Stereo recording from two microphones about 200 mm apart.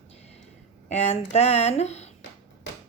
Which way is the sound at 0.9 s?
30° left (ahead or behind).